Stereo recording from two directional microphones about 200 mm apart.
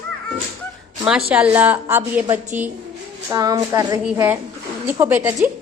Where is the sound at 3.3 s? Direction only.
20° right (ahead or behind).